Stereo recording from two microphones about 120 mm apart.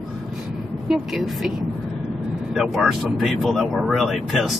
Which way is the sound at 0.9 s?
5° right (ahead or behind).